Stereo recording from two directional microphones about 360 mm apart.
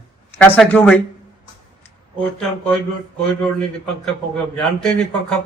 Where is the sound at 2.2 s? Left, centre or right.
Centre.